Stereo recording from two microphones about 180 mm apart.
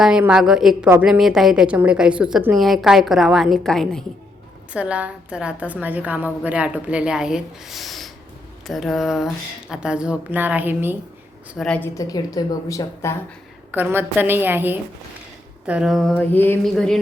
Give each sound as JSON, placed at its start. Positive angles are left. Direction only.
{"t": 0.0, "sound": "a woman's voice", "side_deg": -5}
{"t": 11.5, "sound": "a woman's voice", "side_deg": 5}
{"t": 11.9, "sound": "a woman's voice", "side_deg": 20}
{"t": 13.7, "sound": "a woman's voice", "side_deg": -10}